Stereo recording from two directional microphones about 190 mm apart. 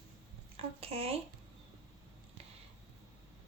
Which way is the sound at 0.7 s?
30° right (ahead or behind).